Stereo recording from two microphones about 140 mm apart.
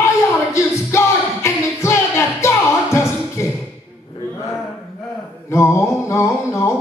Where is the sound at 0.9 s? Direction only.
20° left (ahead or behind).